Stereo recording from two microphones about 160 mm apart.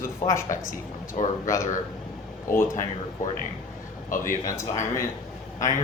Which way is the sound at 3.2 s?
55° left (ahead or behind).